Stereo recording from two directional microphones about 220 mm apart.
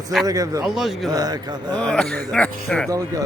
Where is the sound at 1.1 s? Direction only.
15° right (ahead or behind).